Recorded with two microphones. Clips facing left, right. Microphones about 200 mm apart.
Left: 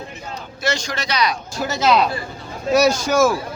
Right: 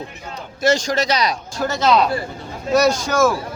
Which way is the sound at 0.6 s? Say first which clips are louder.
Right 7 dB; 45° right (ahead or behind).